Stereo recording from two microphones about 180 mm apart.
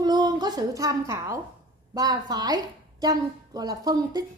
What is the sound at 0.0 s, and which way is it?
A woman's voice, 25° right (ahead or behind).